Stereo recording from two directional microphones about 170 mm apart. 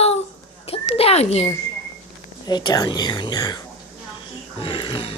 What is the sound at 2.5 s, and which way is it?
Speech, 25° left (ahead or behind).